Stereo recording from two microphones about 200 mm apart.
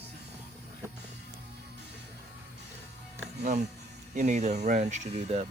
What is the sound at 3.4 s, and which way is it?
Speech, 35° right (ahead or behind).